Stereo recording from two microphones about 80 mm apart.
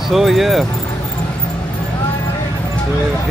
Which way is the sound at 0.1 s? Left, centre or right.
Centre.